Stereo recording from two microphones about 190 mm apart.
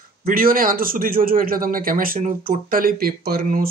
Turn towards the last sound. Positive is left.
turn(degrees=-50)  # may be behind; listen again after turning